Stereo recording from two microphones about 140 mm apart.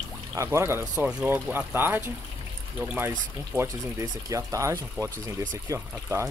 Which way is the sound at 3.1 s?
20° right (ahead or behind).